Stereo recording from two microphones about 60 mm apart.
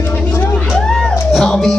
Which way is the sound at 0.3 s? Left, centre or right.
Left.